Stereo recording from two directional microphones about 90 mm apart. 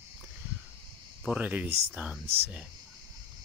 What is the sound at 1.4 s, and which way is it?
Speech, 15° right (ahead or behind).